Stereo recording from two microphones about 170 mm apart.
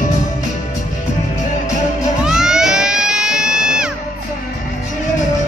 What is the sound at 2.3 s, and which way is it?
Crowd, 5° right (ahead or behind).